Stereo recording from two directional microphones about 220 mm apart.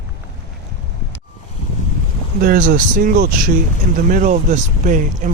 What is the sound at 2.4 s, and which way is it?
Speech, 40° right (ahead or behind).